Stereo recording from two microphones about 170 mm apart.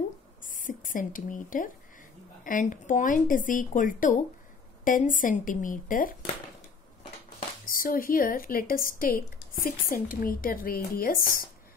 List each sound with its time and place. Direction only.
0.4 s a sound: 50° left (ahead or behind)
2.4 s speech: 50° left (ahead or behind)
7.6 s speech: 55° left (ahead or behind)